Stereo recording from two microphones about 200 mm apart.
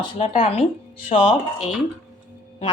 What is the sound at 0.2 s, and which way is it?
Speech, 35° left (ahead or behind).